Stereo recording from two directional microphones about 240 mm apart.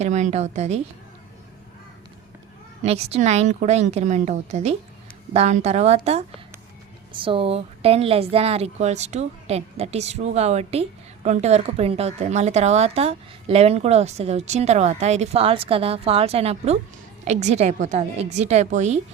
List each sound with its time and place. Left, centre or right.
0.0 s a woman's voice: right
2.8 s a woman's voice: right